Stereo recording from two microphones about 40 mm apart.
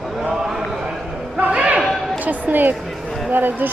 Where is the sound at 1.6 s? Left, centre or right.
Right.